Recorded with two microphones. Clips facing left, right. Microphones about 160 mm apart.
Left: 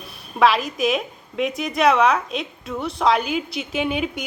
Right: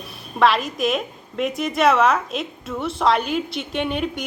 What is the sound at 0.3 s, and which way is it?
A woman's voice, centre (ahead or behind).